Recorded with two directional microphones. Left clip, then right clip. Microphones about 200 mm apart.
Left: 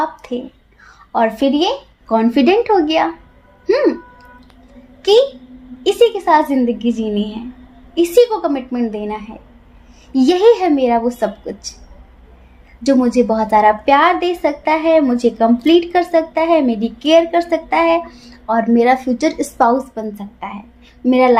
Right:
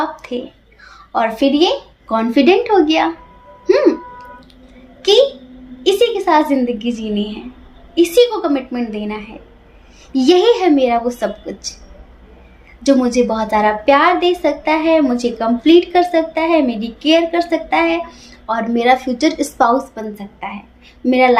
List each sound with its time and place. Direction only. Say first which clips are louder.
0.0 s a woman's voice: left 1 dB; 45° left (ahead or behind)
5.0 s a woman's voice: even; 40° left (ahead or behind)
12.8 s a woman's voice: even; 40° left (ahead or behind)